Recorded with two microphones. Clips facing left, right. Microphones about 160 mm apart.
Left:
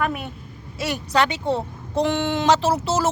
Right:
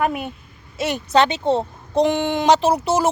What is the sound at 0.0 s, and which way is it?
A woman's voice, 15° right (ahead or behind).